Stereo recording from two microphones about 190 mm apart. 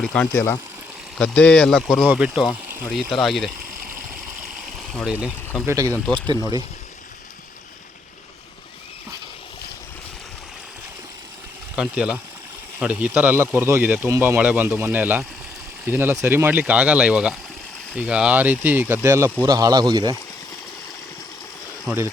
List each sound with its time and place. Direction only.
0.0 s speech: 5° left (ahead or behind)
4.8 s speech: centre (ahead or behind)
5.6 s speech: 15° right (ahead or behind)
11.8 s speech: 5° right (ahead or behind); by 20.1 s 20° right (ahead or behind)